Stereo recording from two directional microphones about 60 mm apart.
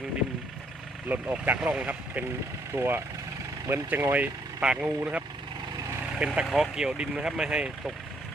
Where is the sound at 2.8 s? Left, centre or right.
Right.